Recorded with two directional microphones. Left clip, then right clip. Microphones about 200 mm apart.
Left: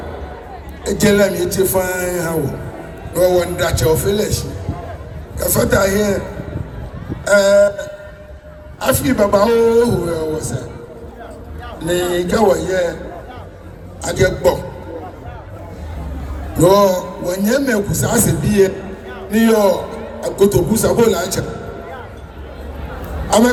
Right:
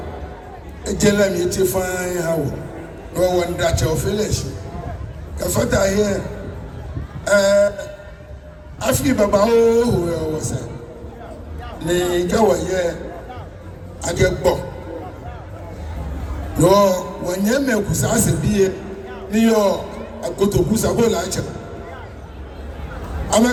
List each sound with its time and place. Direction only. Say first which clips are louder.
0.9 s a man's voice: left 3 dB; 20° left (ahead or behind)
7.3 s a man's voice: left 3 dB; 20° left (ahead or behind)
11.8 s a man's voice: left 1 dB; 25° left (ahead or behind)
14.0 s a man's voice: left 3 dB; 25° left (ahead or behind)
16.6 s a man's voice: left 2 dB; 25° left (ahead or behind)
23.3 s a woman's voice: left 3 dB; 25° left (ahead or behind)